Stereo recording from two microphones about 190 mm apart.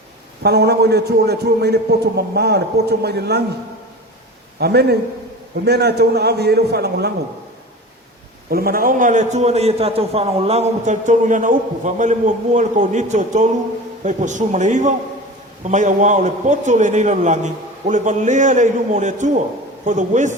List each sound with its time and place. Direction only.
0.4 s a man's voice: 60° right (ahead or behind)
4.6 s a man's voice: 60° right (ahead or behind)
8.4 s a man's voice: 50° right (ahead or behind)